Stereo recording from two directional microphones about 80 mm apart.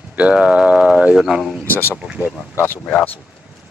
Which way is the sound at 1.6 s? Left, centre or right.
Left.